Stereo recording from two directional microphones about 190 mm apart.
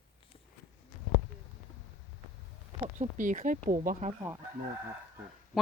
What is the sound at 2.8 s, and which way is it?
Speech, 40° right (ahead or behind).